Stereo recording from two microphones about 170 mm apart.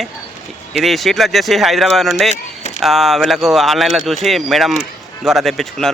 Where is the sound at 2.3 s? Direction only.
45° left (ahead or behind).